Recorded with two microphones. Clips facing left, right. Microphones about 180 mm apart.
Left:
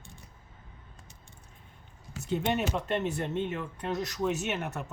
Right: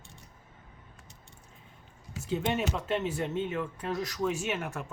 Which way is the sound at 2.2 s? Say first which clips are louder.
Left 1 dB; centre (ahead or behind).